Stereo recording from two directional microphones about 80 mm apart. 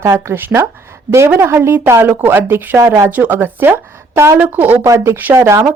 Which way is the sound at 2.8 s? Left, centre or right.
Right.